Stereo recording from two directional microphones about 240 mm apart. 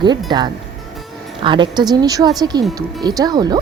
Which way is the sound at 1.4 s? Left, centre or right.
Centre.